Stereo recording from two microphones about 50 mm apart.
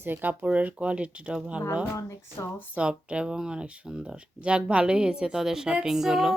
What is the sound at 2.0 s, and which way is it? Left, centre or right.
Speech, left.